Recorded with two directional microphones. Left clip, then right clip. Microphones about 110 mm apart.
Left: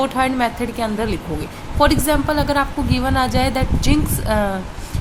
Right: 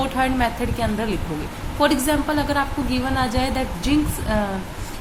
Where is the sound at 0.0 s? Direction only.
35° left (ahead or behind).